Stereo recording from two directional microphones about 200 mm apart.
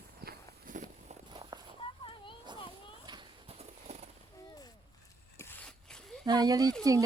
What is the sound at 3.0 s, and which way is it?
Clip-clop, 25° right (ahead or behind).